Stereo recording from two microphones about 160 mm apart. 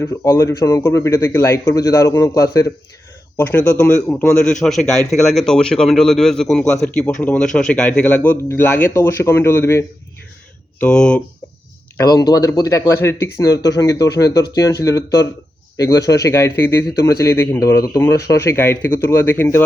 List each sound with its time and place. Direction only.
0.0 s a man's voice: 20° left (ahead or behind)
3.3 s a man's voice: 10° left (ahead or behind)
10.8 s speech: 5° left (ahead or behind)
11.9 s a man's voice: 25° left (ahead or behind)